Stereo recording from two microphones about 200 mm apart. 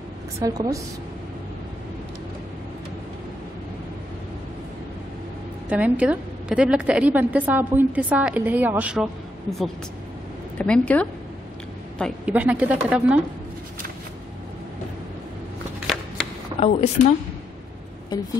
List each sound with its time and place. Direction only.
0.4 s a woman's voice: 15° right (ahead or behind)
5.7 s a woman's voice: 5° right (ahead or behind)
12.3 s a woman's voice: 5° right (ahead or behind)
16.5 s speech: 30° left (ahead or behind)
18.1 s music: 20° left (ahead or behind)